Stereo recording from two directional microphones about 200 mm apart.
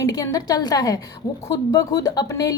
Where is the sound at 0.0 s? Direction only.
20° left (ahead or behind).